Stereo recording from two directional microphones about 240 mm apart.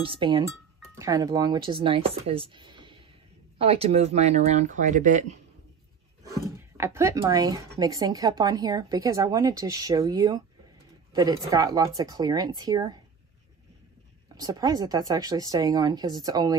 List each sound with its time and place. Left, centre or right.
0.0 s speech: right
6.5 s speech: centre
14.3 s speech: centre